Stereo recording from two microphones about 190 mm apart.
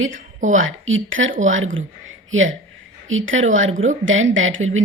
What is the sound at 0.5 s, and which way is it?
A woman's voice, 90° right.